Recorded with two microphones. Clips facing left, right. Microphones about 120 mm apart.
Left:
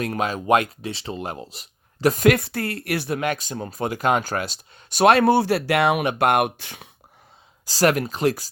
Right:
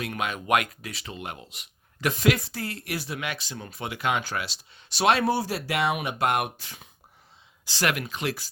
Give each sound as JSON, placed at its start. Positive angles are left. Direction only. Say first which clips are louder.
{"t": 0.0, "sound": "speech", "louder": "left 6 dB", "side_deg": 35}
{"t": 2.1, "sound": "speech", "louder": "left 6 dB", "side_deg": 55}
{"t": 3.2, "sound": "speech", "louder": "left 9 dB", "side_deg": 45}
{"t": 7.6, "sound": "speech", "louder": "left 8 dB", "side_deg": 40}